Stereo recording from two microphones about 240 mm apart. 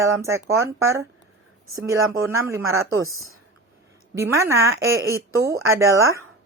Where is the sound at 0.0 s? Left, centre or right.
Centre.